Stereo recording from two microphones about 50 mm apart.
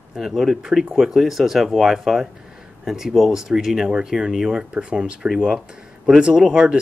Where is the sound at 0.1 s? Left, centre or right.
Centre.